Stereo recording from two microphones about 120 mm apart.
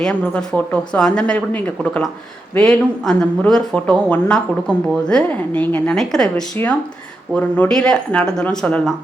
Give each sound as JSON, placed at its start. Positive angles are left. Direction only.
{"t": 0.0, "sound": "a woman's voice", "side_deg": 10}
{"t": 6.6, "sound": "a woman's voice", "side_deg": 15}